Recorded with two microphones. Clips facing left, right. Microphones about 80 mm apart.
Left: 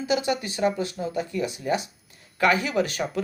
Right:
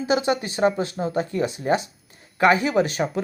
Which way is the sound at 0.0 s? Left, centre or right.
Right.